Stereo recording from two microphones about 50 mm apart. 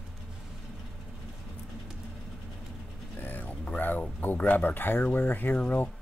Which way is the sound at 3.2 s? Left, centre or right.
Left.